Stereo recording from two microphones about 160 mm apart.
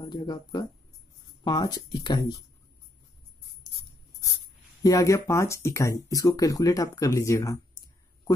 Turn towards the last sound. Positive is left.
turn(degrees=20)  # may be behind; listen again after turning